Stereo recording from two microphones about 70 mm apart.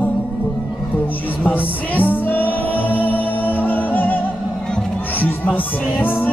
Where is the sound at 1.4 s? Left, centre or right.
Left.